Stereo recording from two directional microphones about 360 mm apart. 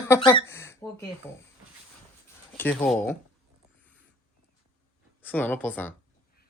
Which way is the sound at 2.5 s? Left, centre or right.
Centre.